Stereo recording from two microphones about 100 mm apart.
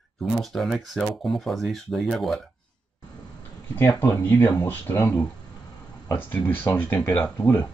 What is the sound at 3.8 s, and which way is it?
Speech, 25° left (ahead or behind).